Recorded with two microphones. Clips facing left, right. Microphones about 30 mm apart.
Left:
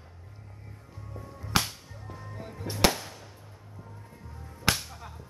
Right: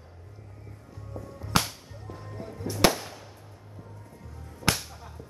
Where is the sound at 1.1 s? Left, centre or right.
Left.